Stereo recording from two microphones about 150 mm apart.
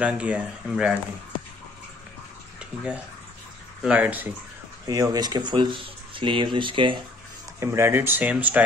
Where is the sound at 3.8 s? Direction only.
10° right (ahead or behind).